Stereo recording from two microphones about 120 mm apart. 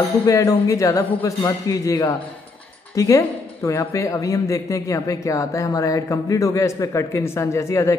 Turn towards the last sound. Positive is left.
turn(degrees=25)  # may be behind; listen again after turning